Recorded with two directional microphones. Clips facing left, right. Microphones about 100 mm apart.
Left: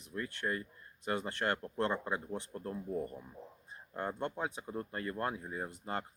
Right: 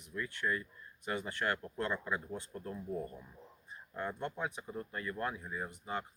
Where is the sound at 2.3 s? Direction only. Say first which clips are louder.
Left 2 dB; 35° left (ahead or behind).